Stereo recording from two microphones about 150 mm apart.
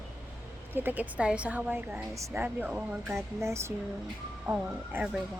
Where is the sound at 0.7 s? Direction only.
10° right (ahead or behind).